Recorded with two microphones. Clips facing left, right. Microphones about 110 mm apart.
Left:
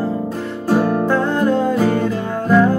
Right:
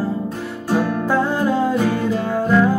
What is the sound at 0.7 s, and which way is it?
Music, 45° left (ahead or behind).